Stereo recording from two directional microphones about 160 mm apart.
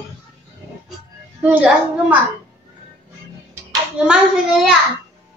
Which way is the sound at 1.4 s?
10° right (ahead or behind).